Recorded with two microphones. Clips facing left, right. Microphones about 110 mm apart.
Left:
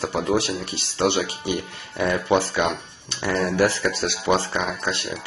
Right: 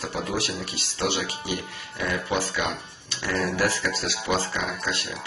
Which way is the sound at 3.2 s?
25° left (ahead or behind).